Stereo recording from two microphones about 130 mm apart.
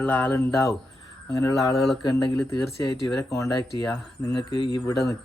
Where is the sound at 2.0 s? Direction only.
30° left (ahead or behind).